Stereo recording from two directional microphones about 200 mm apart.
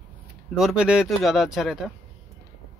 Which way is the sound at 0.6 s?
5° right (ahead or behind).